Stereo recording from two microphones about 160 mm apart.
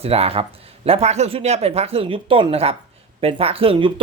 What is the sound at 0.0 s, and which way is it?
Speech, 40° right (ahead or behind).